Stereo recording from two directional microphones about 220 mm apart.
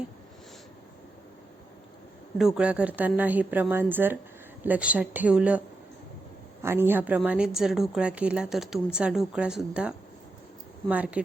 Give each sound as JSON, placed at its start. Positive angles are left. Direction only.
{"t": 2.4, "sound": "a woman's voice", "side_deg": -5}